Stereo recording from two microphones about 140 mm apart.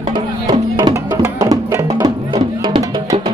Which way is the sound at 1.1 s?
20° right (ahead or behind).